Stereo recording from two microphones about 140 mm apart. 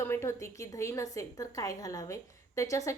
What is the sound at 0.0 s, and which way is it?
A woman's voice, 20° left (ahead or behind).